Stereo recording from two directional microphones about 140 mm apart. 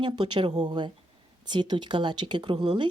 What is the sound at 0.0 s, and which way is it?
Speech, 35° right (ahead or behind).